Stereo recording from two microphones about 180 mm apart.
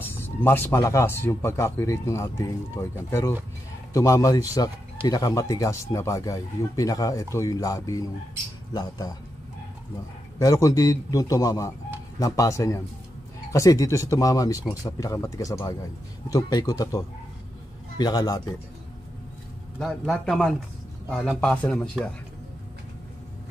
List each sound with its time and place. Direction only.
0.0 s speech: 10° left (ahead or behind)
10.4 s speech: 20° left (ahead or behind)
19.8 s a man's voice: centre (ahead or behind)